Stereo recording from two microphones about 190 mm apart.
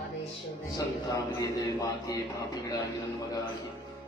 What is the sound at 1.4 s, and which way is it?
A man's voice, 20° left (ahead or behind).